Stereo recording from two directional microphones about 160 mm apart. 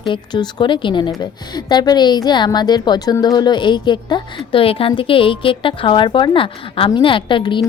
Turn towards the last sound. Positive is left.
turn(degrees=30)  # may be behind; listen again after turning